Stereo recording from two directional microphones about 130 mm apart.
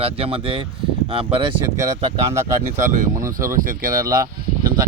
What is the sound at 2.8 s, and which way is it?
Speech, 80° right.